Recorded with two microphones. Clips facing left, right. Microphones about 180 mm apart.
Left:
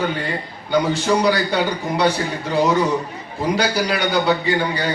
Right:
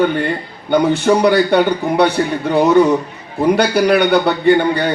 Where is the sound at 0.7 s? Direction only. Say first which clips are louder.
Right 5 dB; 60° right (ahead or behind).